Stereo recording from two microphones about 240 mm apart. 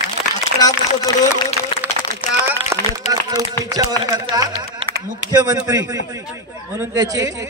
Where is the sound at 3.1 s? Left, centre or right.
Centre.